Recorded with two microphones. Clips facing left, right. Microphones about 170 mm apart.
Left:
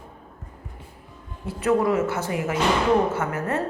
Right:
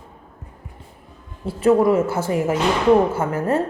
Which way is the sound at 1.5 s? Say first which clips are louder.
Right 6 dB; 30° right (ahead or behind).